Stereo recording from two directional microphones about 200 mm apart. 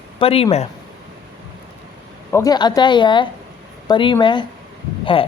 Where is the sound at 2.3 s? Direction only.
15° left (ahead or behind).